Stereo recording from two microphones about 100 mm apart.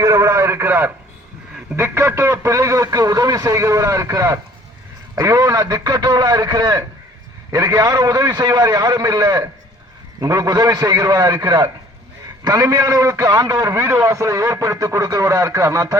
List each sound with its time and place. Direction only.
0.0 s radio: 30° right (ahead or behind)
1.7 s a man's voice: 25° right (ahead or behind); by 11.7 s 45° right (ahead or behind)
12.5 s a man's voice: 30° right (ahead or behind)